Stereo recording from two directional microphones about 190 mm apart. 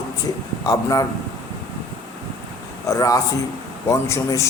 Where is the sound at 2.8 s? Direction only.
15° left (ahead or behind).